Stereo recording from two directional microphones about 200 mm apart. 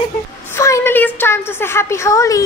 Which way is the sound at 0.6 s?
15° left (ahead or behind).